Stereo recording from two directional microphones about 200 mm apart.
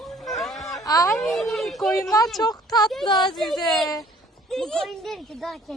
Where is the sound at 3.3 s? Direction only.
Centre (ahead or behind).